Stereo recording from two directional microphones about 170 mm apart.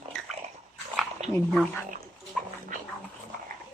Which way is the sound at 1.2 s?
40° right (ahead or behind).